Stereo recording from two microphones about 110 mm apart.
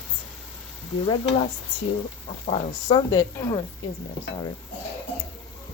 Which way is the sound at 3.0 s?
30° left (ahead or behind).